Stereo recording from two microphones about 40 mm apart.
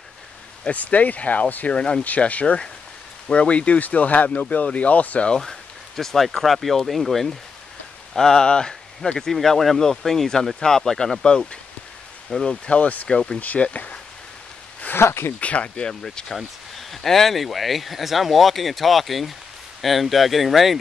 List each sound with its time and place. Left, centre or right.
0.7 s speech: left
5.4 s speech: centre
12.4 s speech: left
13.1 s speech: centre
13.6 s speech: left
15.0 s speech: left
15.4 s speech: left
15.9 s speech: centre
16.3 s speech: centre